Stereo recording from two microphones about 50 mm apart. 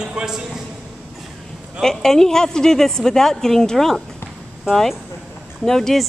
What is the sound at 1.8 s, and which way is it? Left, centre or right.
A woman's voice, centre.